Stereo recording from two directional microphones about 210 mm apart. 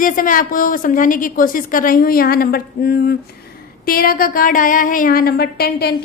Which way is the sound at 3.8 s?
45° left (ahead or behind).